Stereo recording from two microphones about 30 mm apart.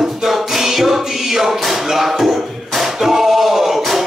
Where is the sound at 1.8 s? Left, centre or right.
Centre.